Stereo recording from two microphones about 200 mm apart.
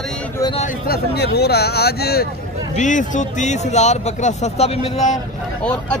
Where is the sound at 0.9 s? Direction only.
55° left (ahead or behind).